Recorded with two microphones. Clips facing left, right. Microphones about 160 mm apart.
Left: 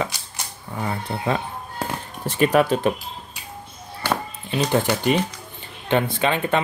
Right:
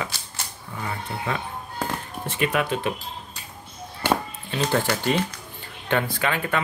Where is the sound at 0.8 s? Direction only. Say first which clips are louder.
Left 4 dB; 35° left (ahead or behind).